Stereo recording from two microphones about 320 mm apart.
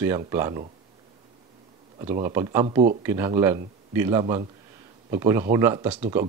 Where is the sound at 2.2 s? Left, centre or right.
Centre.